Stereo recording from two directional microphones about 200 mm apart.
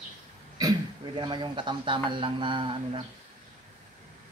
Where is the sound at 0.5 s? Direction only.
20° right (ahead or behind).